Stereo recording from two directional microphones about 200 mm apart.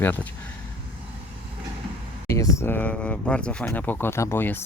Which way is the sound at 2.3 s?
15° left (ahead or behind).